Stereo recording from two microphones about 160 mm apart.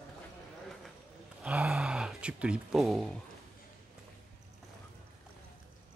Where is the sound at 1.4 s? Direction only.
5° right (ahead or behind).